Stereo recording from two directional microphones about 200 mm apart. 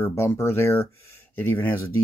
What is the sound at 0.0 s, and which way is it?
Speech, 10° left (ahead or behind).